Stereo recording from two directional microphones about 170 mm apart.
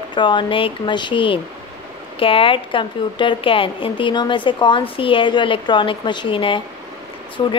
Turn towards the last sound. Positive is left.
turn(degrees=25)  # may be behind; listen again after turning